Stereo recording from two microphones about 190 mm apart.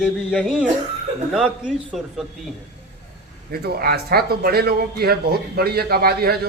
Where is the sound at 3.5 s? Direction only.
55° right (ahead or behind).